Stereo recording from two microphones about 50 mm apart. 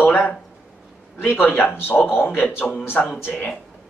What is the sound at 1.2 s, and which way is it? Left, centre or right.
A man's voice, left.